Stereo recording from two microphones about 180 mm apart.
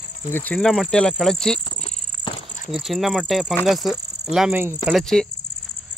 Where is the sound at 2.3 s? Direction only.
25° left (ahead or behind).